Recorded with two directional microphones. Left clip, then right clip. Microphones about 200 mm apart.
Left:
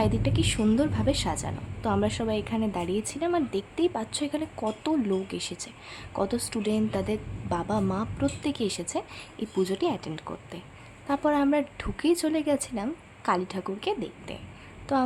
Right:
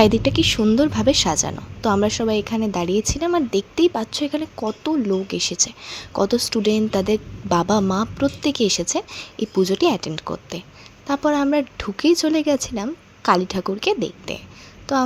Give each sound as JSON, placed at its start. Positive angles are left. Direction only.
{"t": 0.0, "sound": "a woman's voice", "side_deg": -30}